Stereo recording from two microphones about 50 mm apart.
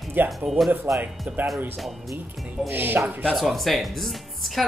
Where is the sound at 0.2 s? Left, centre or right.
Right.